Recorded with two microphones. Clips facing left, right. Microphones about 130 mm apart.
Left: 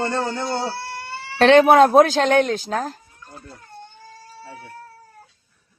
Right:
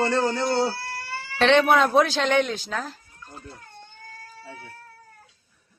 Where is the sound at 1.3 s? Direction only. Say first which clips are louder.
Left 6 dB; 45° left (ahead or behind).